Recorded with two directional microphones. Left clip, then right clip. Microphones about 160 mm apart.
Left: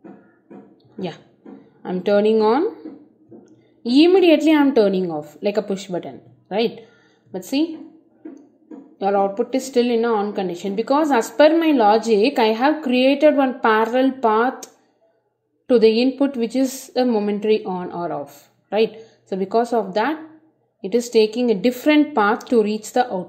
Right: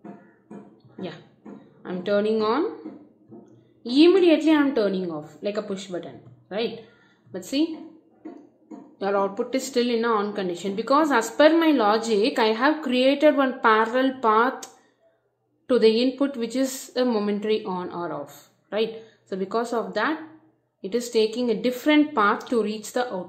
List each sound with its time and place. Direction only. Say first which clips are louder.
0.9 s a woman's voice: left 6 dB; 35° left (ahead or behind)
3.8 s a woman's voice: left 3 dB; 35° left (ahead or behind)
7.3 s a woman's voice: left 4 dB; 25° left (ahead or behind)
8.9 s a woman's voice: left 5 dB; 20° left (ahead or behind)